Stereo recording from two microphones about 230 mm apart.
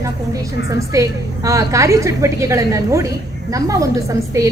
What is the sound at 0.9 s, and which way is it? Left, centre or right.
A woman's voice, centre.